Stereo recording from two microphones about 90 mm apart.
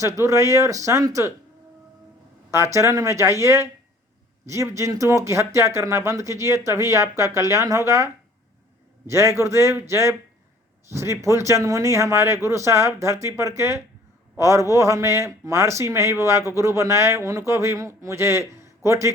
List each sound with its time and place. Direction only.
0.0 s speech: 35° right (ahead or behind)
2.5 s speech: 30° right (ahead or behind)